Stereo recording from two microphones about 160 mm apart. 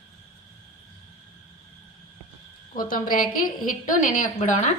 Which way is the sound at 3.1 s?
60° left (ahead or behind).